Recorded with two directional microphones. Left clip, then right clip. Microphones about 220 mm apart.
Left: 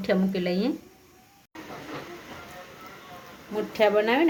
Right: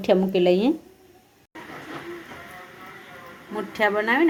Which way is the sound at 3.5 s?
5° left (ahead or behind).